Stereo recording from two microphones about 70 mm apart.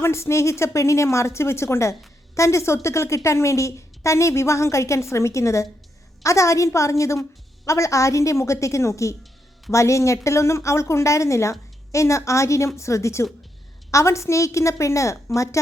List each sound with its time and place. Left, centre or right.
0.0 s a woman's voice: left